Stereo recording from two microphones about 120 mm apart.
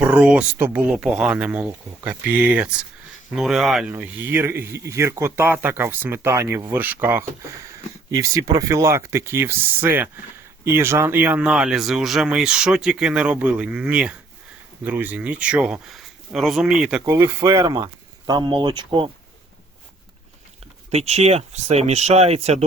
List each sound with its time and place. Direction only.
0.0 s speech: 10° right (ahead or behind)
3.9 s speech: 15° right (ahead or behind)
7.7 s speech: 30° right (ahead or behind); by 17.0 s 5° right (ahead or behind)
17.1 s speech: 25° right (ahead or behind); by 19.1 s 40° right (ahead or behind)
20.9 s speech: 65° right (ahead or behind)